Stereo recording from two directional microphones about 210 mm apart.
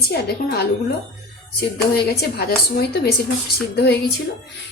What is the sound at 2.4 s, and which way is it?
Speech, 50° left (ahead or behind).